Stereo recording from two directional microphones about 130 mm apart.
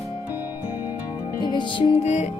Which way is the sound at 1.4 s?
35° left (ahead or behind).